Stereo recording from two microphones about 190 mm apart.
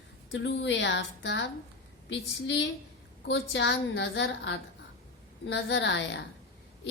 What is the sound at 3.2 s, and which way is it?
A woman's voice, 70° left (ahead or behind).